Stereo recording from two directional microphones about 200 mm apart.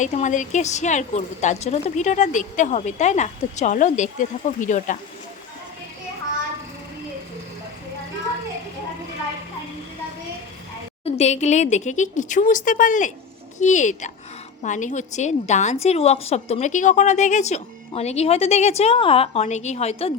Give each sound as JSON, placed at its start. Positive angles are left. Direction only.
{"t": 0.0, "sound": "a woman's voice", "side_deg": 40}
{"t": 11.0, "sound": "a woman's voice", "side_deg": 35}